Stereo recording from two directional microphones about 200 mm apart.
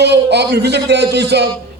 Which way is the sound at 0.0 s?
55° right (ahead or behind).